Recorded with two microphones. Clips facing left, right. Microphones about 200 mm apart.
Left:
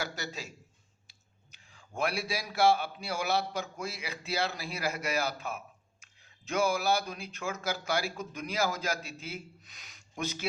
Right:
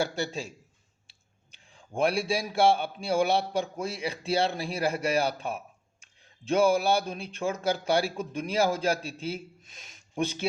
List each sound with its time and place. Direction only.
0.0 s a man's voice: 30° right (ahead or behind)
1.5 s a man's voice: 30° right (ahead or behind)